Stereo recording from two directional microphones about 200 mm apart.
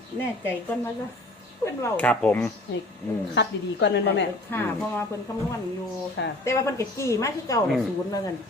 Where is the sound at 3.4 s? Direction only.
60° left (ahead or behind).